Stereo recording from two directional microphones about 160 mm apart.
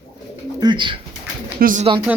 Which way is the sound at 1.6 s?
60° right (ahead or behind).